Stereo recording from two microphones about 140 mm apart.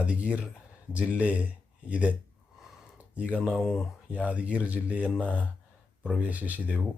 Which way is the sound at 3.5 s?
Centre (ahead or behind).